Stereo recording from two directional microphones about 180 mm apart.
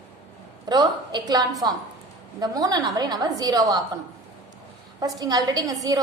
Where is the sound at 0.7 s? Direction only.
25° right (ahead or behind).